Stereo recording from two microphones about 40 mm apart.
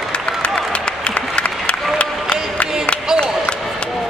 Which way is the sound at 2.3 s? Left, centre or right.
Left.